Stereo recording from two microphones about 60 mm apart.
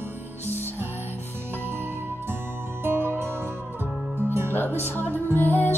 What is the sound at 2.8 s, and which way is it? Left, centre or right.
Music, right.